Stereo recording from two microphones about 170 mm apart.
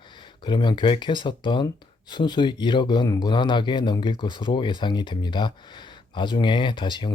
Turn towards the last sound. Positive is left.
turn(degrees=25)  # may be behind; listen again after turning